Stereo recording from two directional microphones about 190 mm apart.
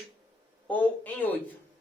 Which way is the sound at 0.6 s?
10° left (ahead or behind).